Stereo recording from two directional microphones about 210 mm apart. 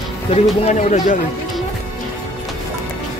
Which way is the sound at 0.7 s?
35° left (ahead or behind).